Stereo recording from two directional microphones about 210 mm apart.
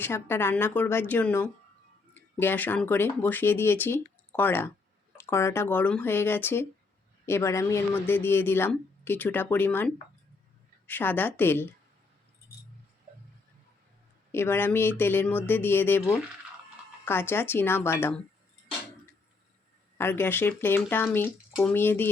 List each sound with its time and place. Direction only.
0.0 s speech: 10° left (ahead or behind)
14.3 s speech: 10° left (ahead or behind)
20.0 s speech: 10° left (ahead or behind)